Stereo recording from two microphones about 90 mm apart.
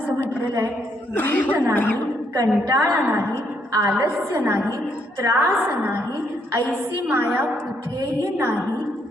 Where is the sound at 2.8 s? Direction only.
25° right (ahead or behind).